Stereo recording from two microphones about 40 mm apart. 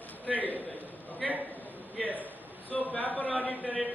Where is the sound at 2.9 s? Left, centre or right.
Left.